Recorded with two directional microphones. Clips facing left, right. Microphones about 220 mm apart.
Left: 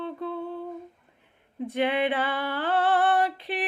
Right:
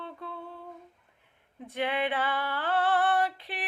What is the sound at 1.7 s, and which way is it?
Female singing, 20° left (ahead or behind).